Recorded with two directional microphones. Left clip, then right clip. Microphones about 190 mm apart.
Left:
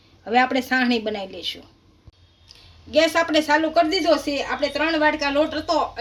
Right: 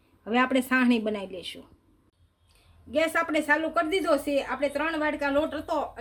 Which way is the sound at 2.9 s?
35° right (ahead or behind).